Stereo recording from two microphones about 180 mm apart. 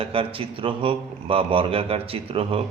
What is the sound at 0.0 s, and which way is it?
A man's voice, 30° right (ahead or behind).